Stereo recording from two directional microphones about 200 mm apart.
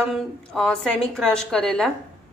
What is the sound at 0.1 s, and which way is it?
A woman's voice, 5° left (ahead or behind).